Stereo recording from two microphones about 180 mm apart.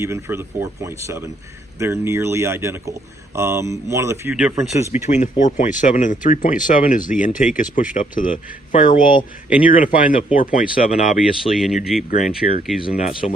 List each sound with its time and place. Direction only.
0.0 s speech: 15° right (ahead or behind)
5.0 s speech: 40° left (ahead or behind)
11.2 s speech: centre (ahead or behind)
12.4 s speech: 50° left (ahead or behind)
13.0 s speech: 40° left (ahead or behind)